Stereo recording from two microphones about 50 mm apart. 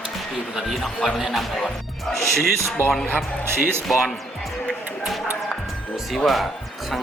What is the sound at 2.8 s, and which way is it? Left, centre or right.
Speech, right.